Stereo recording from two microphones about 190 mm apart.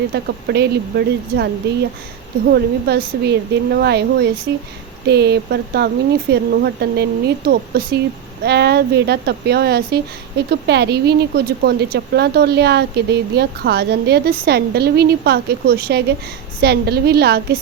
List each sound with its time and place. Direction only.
0.1 s speech: 60° right (ahead or behind)